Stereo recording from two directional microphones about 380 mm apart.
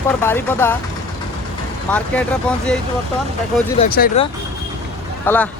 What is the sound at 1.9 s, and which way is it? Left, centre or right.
Speech, centre.